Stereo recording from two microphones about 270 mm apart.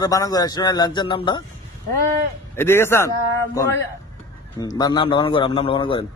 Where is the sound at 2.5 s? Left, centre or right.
Centre.